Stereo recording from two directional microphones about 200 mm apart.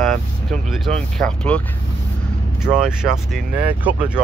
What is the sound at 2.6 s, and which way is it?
Speech, 5° right (ahead or behind).